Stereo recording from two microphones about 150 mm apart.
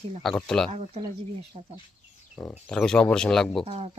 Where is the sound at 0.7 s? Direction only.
45° right (ahead or behind).